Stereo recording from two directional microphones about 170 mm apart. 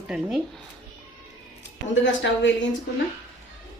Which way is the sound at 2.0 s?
90° left.